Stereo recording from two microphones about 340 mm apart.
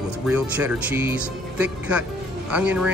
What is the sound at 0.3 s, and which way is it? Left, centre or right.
Speech, centre.